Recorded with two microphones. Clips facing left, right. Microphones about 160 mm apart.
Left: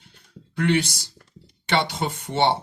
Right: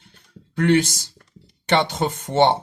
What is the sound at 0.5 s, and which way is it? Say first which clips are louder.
Speech: right 4 dB; 50° right (ahead or behind).